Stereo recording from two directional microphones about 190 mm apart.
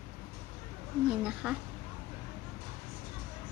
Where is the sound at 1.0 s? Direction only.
5° right (ahead or behind).